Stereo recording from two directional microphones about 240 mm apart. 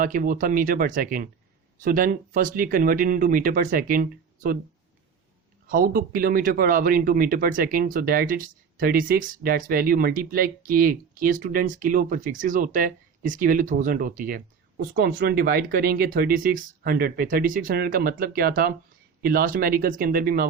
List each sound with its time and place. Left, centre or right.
0.0 s speech: right
5.6 s speech: right